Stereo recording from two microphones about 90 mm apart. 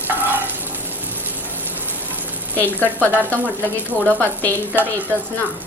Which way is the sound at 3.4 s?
20° right (ahead or behind).